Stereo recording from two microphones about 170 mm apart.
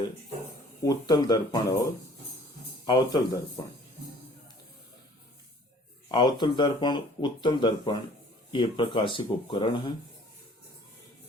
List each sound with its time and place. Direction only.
0.9 s speech: 25° left (ahead or behind)
6.1 s speech: 25° left (ahead or behind)